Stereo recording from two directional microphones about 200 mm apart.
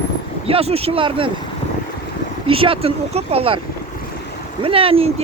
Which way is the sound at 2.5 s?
25° right (ahead or behind).